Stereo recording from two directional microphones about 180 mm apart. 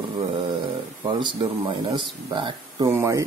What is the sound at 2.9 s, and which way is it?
Speech, 15° right (ahead or behind).